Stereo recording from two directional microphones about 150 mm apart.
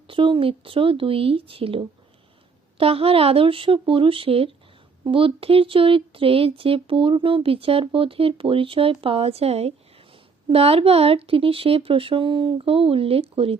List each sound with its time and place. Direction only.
0.1 s speech: 35° right (ahead or behind)